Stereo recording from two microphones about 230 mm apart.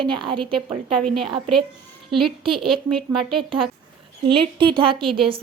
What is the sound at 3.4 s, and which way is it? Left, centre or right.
A woman's voice, right.